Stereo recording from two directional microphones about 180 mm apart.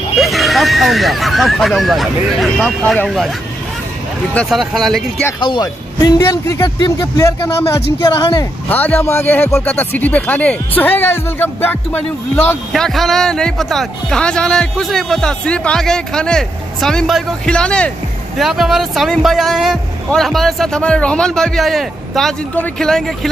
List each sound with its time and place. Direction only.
0.2 s speech: centre (ahead or behind)
5.4 s speech: 25° left (ahead or behind)
8.6 s speech: 10° left (ahead or behind)